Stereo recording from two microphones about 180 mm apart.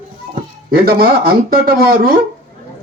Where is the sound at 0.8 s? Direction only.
55° right (ahead or behind).